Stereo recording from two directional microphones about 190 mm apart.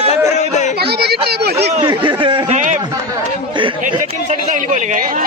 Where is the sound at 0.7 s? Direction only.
60° right (ahead or behind).